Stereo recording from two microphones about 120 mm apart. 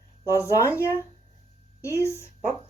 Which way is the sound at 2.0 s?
25° left (ahead or behind).